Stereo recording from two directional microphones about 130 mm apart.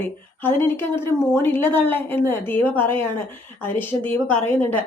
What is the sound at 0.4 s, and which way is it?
A woman's voice, 15° left (ahead or behind).